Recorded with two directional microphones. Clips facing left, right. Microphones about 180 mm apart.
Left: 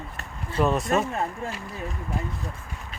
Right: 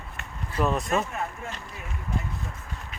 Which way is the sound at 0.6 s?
Centre (ahead or behind).